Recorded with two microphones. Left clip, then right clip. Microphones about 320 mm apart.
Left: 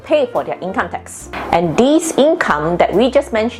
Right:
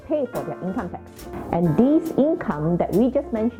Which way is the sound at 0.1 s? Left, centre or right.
Centre.